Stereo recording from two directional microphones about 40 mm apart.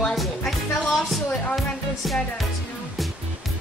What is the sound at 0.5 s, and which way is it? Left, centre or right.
Music, centre.